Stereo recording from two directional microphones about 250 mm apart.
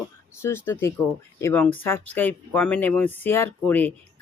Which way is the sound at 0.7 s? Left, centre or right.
Centre.